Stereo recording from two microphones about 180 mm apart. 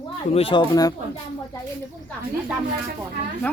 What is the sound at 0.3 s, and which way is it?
Speech, 30° left (ahead or behind).